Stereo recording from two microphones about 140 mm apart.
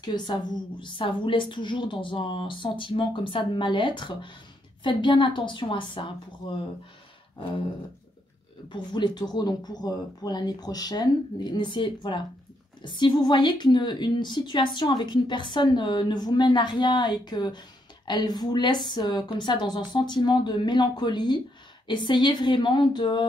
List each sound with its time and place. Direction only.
0.0 s a woman's voice: 30° left (ahead or behind)
8.6 s a woman's voice: 35° left (ahead or behind)